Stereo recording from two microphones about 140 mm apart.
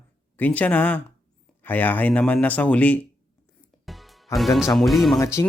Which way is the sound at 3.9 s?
Centre (ahead or behind).